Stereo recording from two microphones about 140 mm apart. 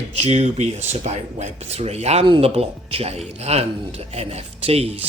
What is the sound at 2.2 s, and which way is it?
Speech, 35° right (ahead or behind).